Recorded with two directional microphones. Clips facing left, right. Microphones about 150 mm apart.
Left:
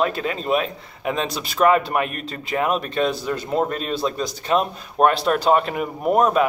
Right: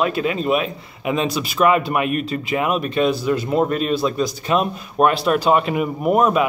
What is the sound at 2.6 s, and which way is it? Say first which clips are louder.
Speech: even; 35° left (ahead or behind).